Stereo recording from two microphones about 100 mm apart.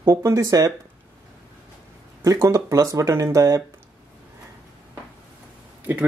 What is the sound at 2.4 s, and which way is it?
Speech, 35° right (ahead or behind).